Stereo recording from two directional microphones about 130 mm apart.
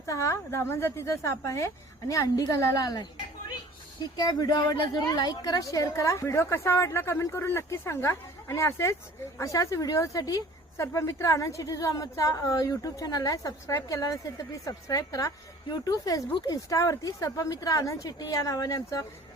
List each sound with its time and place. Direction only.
0.0 s speech: 25° left (ahead or behind)